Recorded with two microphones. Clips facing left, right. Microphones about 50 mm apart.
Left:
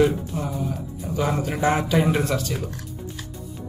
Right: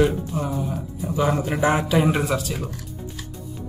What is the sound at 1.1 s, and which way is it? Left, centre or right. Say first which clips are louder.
A man's voice: right 2 dB; centre.